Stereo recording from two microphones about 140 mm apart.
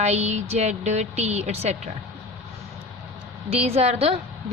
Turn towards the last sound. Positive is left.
turn(degrees=-45)  # may be behind; listen again after turning